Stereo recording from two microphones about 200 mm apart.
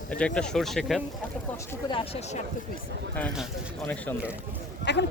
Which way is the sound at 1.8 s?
25° left (ahead or behind).